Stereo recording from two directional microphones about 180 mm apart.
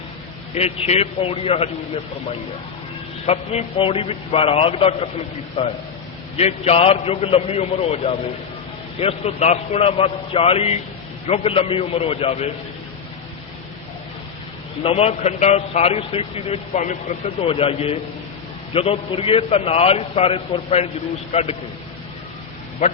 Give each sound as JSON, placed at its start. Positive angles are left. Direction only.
{"t": 0.5, "sound": "a man's voice", "side_deg": 35}
{"t": 3.2, "sound": "a man's voice", "side_deg": 35}
{"t": 6.3, "sound": "a man's voice", "side_deg": 35}
{"t": 14.8, "sound": "a man's voice", "side_deg": 35}